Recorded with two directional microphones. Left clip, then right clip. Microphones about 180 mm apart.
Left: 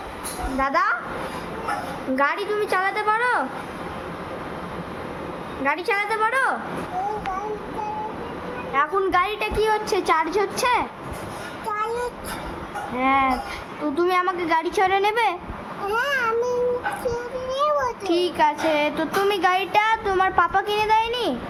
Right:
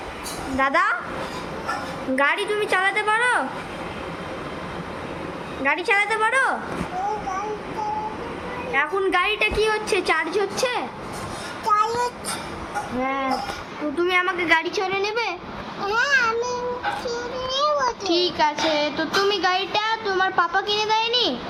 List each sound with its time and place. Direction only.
0.6 s a woman's voice: centre (ahead or behind)
2.1 s a woman's voice: centre (ahead or behind)
5.6 s a woman's voice: centre (ahead or behind)
8.7 s a woman's voice: 5° left (ahead or behind)
13.0 s speech: 25° left (ahead or behind)
14.0 s a woman's voice: 15° left (ahead or behind)
17.1 s child singing: 15° left (ahead or behind)
19.7 s a woman's voice: 20° left (ahead or behind)